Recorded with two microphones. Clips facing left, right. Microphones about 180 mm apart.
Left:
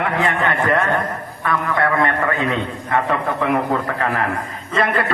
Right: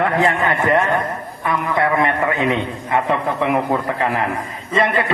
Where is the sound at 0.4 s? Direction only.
20° right (ahead or behind).